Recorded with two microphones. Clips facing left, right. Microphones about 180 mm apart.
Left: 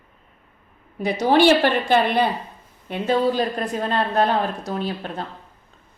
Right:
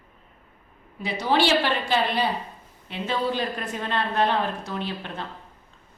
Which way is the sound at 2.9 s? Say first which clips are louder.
Left 6 dB; 45° left (ahead or behind).